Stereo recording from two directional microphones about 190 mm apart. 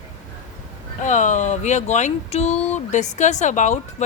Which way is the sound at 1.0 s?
40° left (ahead or behind).